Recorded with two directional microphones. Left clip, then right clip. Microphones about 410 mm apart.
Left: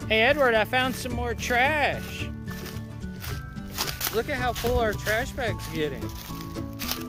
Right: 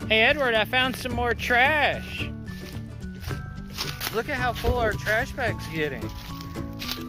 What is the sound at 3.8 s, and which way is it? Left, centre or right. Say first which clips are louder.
Speech: left 1 dB; centre.